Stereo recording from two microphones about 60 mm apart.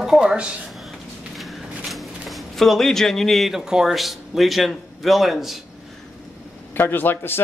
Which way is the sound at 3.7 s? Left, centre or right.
Centre.